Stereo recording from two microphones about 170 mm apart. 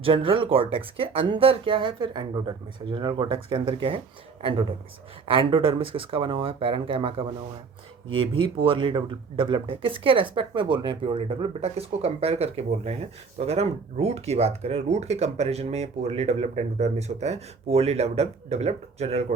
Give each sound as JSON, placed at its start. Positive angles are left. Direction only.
{"t": 0.0, "sound": "speech", "side_deg": -30}
{"t": 5.3, "sound": "speech", "side_deg": -30}